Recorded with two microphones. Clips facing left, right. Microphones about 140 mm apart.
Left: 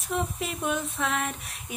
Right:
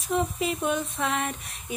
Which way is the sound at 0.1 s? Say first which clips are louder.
Right 4 dB; centre (ahead or behind).